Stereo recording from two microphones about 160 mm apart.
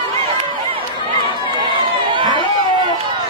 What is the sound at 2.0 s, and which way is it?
Chatter, 30° right (ahead or behind).